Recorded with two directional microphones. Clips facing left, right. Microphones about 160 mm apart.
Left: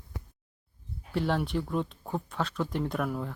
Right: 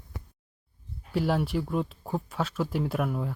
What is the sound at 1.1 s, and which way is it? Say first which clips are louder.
Speech: right 2 dB; 5° right (ahead or behind).